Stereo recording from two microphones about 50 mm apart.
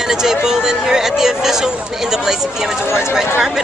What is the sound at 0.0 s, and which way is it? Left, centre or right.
Speech, centre.